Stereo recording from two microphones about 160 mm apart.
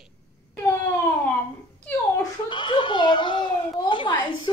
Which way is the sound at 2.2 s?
30° left (ahead or behind).